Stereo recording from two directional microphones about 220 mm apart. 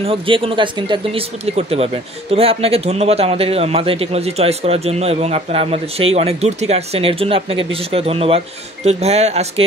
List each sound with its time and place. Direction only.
0.0 s a man's voice: 25° right (ahead or behind)